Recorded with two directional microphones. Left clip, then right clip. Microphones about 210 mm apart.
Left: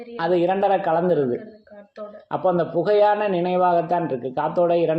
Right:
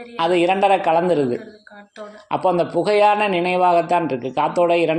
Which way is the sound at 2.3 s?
20° right (ahead or behind).